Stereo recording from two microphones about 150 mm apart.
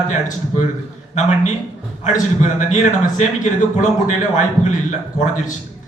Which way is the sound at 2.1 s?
55° left (ahead or behind).